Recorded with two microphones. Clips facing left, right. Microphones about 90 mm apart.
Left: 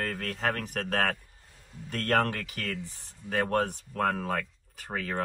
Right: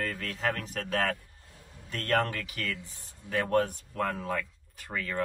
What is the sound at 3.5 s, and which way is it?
Speech, 60° left (ahead or behind).